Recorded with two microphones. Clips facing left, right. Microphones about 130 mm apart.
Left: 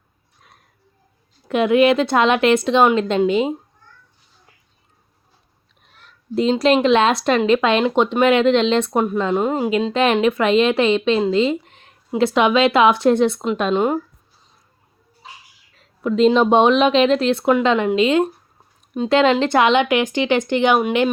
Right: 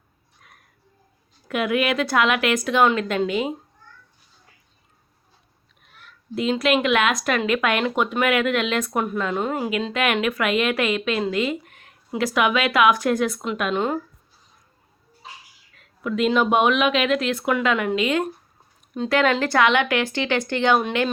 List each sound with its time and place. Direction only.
1.5 s a woman's voice: 25° left (ahead or behind)
6.0 s a woman's voice: 35° left (ahead or behind)
15.8 s a woman's voice: 30° left (ahead or behind); by 21.1 s 15° left (ahead or behind)